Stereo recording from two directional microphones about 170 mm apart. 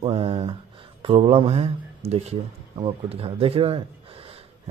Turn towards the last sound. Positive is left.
turn(degrees=-35)  # may be behind; listen again after turning